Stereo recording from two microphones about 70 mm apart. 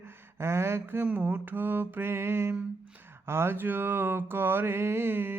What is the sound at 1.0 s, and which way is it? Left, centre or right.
Mantra, right.